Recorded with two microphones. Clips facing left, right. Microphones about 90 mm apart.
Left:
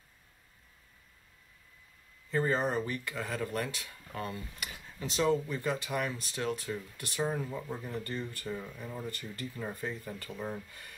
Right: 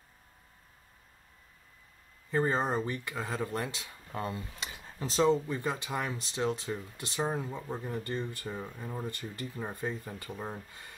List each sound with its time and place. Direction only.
2.3 s speech: 20° right (ahead or behind)
4.8 s a sound: 35° right (ahead or behind)
5.2 s speech: 20° right (ahead or behind)